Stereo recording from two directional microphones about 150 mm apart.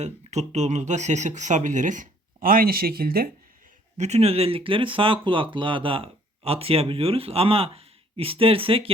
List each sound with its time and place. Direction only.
0.0 s speech: 50° right (ahead or behind); by 3.2 s 85° right
3.9 s speech: 50° right (ahead or behind)